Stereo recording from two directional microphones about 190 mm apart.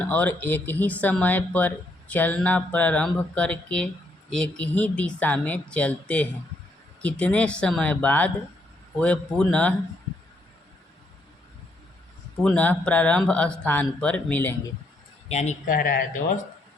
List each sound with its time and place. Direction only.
0.0 s speech: 10° left (ahead or behind)
12.4 s speech: 5° left (ahead or behind)
15.3 s speech: 35° left (ahead or behind)